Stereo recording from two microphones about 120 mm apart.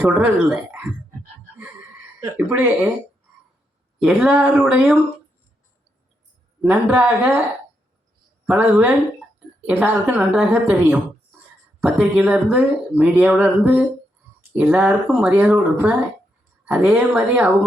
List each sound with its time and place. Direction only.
0.0 s speech: 10° right (ahead or behind)
2.3 s speech: 15° right (ahead or behind)
4.0 s speech: 10° right (ahead or behind)
6.6 s speech: 10° right (ahead or behind)
8.4 s speech: 10° right (ahead or behind)